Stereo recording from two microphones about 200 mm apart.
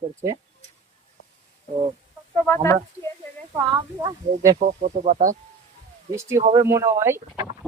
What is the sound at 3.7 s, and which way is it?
Speech, 20° right (ahead or behind).